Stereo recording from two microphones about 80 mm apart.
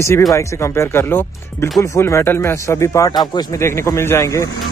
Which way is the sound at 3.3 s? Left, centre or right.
Left.